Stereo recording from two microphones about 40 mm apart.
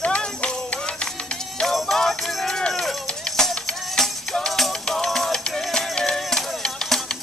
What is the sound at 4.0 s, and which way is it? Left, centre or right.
Music, centre.